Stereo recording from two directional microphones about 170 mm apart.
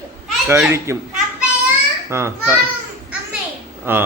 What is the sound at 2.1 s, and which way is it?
Speech, 15° right (ahead or behind).